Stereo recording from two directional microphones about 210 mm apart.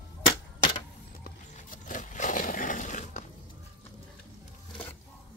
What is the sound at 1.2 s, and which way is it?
Music, 40° left (ahead or behind).